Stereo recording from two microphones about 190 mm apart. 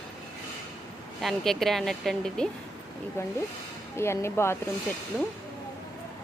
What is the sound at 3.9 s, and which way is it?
Speech, 15° left (ahead or behind).